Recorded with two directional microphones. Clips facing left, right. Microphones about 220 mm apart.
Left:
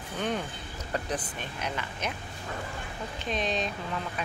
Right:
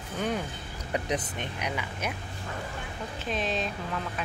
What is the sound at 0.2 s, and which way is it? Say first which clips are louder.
Boat: right 1 dB; 5° right (ahead or behind).